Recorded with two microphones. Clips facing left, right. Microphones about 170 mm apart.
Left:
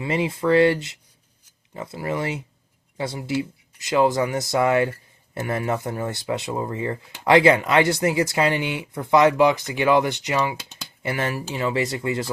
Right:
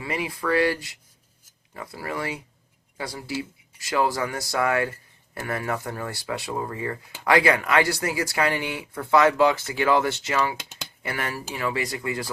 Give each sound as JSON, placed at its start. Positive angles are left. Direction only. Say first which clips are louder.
{"t": 0.0, "sound": "speech", "louder": "left 6 dB", "side_deg": 25}